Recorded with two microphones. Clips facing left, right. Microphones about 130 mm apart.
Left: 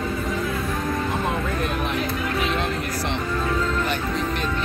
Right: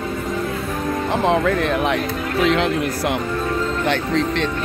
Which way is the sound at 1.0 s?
80° right.